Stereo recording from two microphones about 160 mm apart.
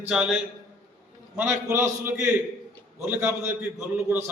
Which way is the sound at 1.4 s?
15° right (ahead or behind).